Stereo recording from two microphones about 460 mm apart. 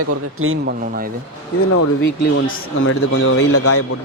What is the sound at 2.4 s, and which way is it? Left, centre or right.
A man's voice, left.